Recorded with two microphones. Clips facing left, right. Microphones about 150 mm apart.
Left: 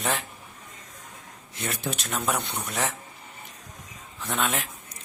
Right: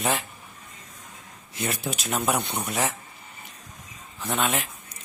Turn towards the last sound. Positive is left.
turn(degrees=0)  # may be behind; listen again after turning